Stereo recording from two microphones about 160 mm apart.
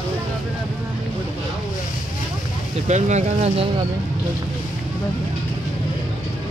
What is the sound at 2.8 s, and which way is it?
Speech, 45° right (ahead or behind).